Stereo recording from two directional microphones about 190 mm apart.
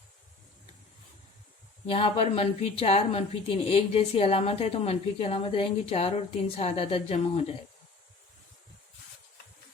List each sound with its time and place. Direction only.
1.9 s a woman's voice: 30° left (ahead or behind)